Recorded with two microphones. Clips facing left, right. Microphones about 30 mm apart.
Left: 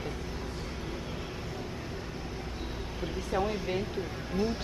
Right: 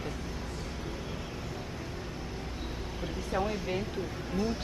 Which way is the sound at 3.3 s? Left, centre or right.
Centre.